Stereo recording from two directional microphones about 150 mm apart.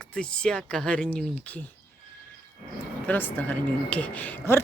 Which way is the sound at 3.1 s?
10° left (ahead or behind).